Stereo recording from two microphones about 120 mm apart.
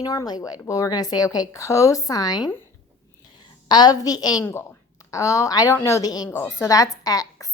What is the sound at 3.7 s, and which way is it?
A woman's voice, 35° left (ahead or behind).